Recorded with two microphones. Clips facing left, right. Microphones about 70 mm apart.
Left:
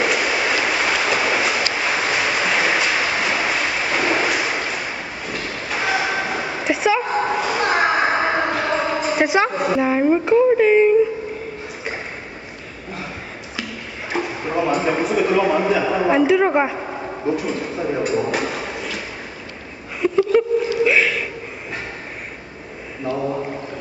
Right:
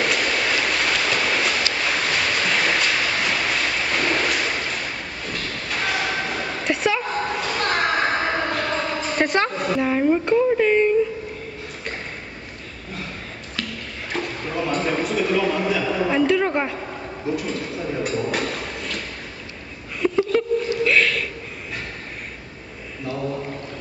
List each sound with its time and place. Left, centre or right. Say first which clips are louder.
0.0 s train: left 3 dB; centre
14.1 s a sound: left 5 dB; centre
23.0 s mantra: left 4 dB; centre